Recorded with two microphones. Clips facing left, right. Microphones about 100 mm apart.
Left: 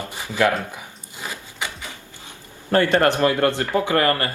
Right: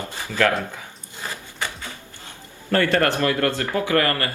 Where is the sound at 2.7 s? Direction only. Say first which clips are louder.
Left 2 dB; 25° left (ahead or behind).